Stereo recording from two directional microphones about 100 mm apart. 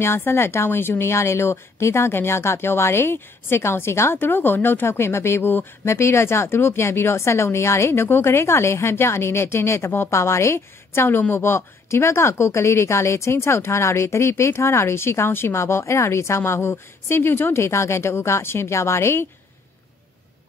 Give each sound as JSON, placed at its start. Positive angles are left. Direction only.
{"t": 0.0, "sound": "a woman's voice", "side_deg": 25}